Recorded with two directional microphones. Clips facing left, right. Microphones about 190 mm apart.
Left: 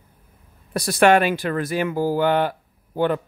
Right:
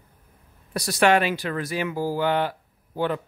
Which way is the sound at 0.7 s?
50° left (ahead or behind).